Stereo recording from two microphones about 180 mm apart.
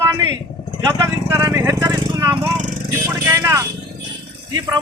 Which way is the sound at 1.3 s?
15° right (ahead or behind).